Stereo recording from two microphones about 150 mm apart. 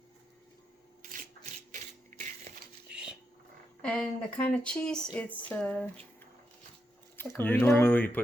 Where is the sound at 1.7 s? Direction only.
65° right (ahead or behind).